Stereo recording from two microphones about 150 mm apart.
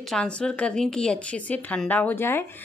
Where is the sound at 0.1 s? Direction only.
5° left (ahead or behind).